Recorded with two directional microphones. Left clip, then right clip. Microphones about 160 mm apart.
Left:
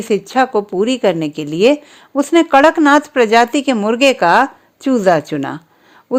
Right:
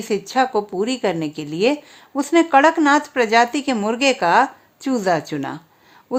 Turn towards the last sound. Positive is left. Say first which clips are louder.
# left 6 dB
turn(degrees=30)  # may be behind; listen again after turning